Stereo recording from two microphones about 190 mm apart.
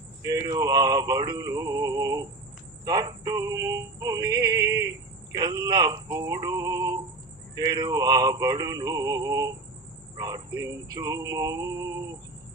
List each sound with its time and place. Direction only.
0.2 s male singing: 20° right (ahead or behind)
2.8 s music: 20° right (ahead or behind)
5.3 s male singing: 20° right (ahead or behind)